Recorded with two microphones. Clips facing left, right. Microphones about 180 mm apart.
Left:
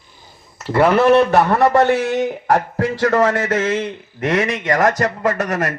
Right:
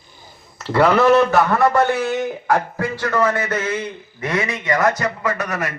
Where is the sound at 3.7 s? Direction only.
90° left.